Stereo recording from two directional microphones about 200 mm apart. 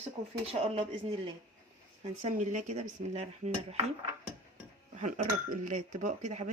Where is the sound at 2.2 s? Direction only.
40° right (ahead or behind).